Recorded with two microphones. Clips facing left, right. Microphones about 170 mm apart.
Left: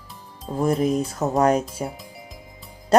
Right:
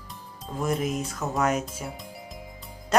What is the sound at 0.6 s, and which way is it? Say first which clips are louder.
Speech: left 6 dB; 35° left (ahead or behind).